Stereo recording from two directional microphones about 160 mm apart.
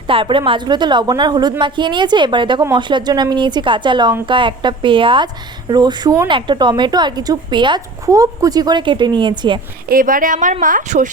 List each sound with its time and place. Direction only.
0.1 s speech: 30° right (ahead or behind)
9.9 s speech: 60° right (ahead or behind)